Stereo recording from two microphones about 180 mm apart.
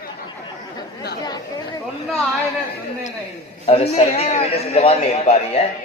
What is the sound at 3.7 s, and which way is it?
A man's voice, 35° left (ahead or behind).